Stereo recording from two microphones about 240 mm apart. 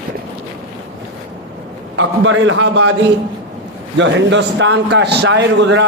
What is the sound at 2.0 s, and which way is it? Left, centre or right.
A man's voice, right.